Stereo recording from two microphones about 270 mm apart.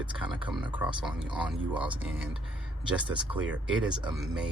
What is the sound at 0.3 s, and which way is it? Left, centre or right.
Speech, centre.